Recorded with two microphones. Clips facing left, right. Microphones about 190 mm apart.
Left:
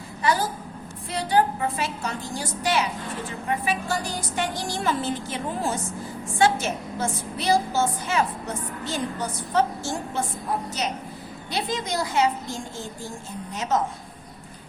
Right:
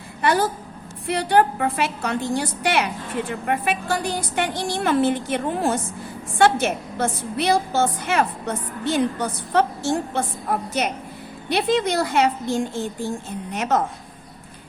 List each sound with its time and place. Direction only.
0.2 s a woman's voice: 65° right (ahead or behind)
11.4 s a woman's voice: 65° right (ahead or behind)